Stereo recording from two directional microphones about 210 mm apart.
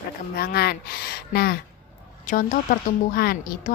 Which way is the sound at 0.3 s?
50° left (ahead or behind).